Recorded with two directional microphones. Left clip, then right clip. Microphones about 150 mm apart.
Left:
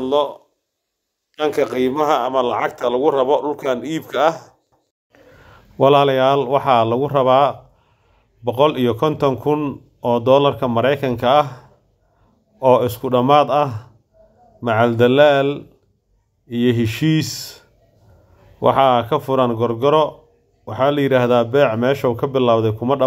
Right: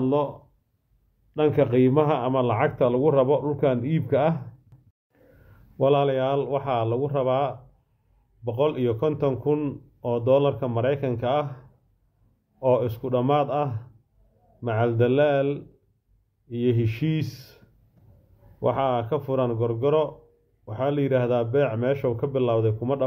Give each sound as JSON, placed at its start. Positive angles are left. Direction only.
{"t": 0.0, "sound": "speech", "side_deg": 25}
{"t": 1.3, "sound": "speech", "side_deg": 35}
{"t": 5.8, "sound": "a man's voice", "side_deg": 35}